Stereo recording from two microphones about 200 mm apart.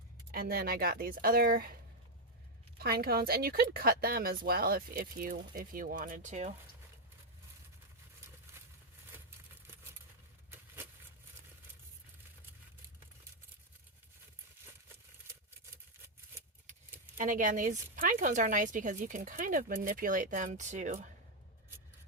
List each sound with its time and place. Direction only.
0.3 s speech: 50° right (ahead or behind)
2.7 s speech: 50° right (ahead or behind)
17.2 s speech: 40° right (ahead or behind)